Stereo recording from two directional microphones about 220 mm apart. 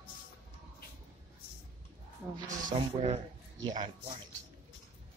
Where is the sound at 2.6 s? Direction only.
30° right (ahead or behind).